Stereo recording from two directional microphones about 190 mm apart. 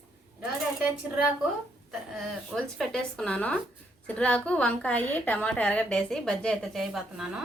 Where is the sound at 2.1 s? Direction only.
Centre (ahead or behind).